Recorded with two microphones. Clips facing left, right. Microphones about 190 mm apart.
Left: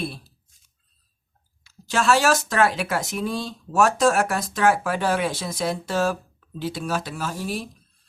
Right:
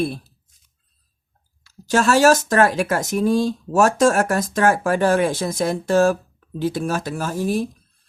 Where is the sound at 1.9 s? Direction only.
45° right (ahead or behind).